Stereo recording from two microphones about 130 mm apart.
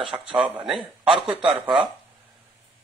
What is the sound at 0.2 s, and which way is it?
Speech, 5° right (ahead or behind).